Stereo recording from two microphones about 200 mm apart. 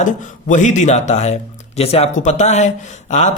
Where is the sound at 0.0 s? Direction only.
40° left (ahead or behind).